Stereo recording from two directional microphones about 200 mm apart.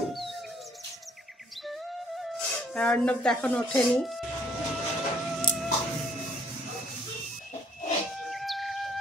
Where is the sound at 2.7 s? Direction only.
5° left (ahead or behind).